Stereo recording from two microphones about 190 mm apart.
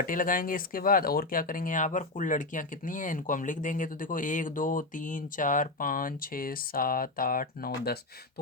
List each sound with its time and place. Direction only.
0.0 s speech: 45° left (ahead or behind)